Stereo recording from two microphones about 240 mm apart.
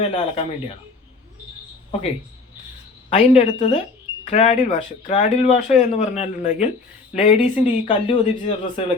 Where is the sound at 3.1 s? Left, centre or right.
Left.